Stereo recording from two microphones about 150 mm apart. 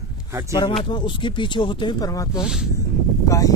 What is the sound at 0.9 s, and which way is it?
Speech, 30° left (ahead or behind).